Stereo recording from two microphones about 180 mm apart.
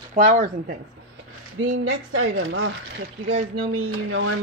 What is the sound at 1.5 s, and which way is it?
Speech, 90° right.